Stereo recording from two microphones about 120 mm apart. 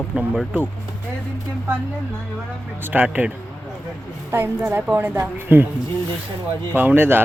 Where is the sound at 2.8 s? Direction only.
15° right (ahead or behind).